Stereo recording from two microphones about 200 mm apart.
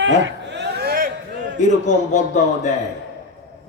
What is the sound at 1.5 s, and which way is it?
Speech, 35° left (ahead or behind).